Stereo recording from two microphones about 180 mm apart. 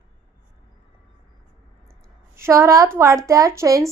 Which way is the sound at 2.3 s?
15° right (ahead or behind).